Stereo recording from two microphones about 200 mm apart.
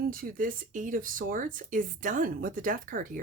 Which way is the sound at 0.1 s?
45° right (ahead or behind).